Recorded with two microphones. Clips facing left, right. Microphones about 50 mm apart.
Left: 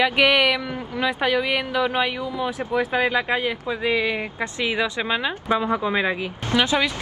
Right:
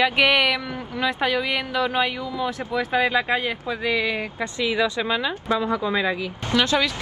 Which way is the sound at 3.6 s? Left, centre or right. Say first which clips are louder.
Left 1 dB; centre.